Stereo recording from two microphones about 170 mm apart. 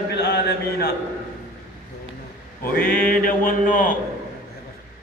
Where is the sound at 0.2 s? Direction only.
65° left (ahead or behind).